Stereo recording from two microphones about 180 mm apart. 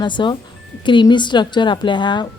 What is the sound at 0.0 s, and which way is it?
A woman's voice, 25° left (ahead or behind).